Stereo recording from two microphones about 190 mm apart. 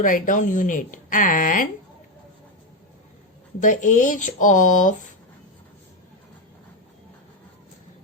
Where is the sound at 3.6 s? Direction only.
40° left (ahead or behind).